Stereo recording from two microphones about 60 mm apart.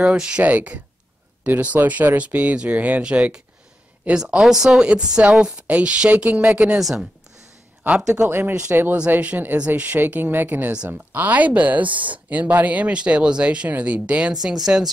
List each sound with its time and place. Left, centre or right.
0.0 s speech: centre
6.8 s a woman's voice: centre
8.3 s speech: right
14.3 s speech: centre